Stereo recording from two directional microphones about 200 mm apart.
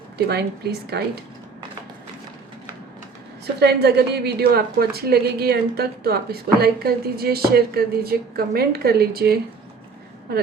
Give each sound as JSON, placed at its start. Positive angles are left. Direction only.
{"t": 0.3, "sound": "a woman's voice", "side_deg": -55}
{"t": 3.4, "sound": "a woman's voice", "side_deg": -55}